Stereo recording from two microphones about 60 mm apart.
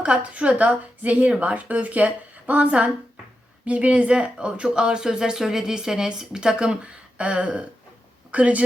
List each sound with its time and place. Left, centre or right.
0.0 s a woman's voice: right